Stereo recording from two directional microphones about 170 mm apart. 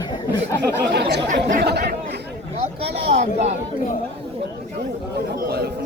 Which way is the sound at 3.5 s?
50° left (ahead or behind).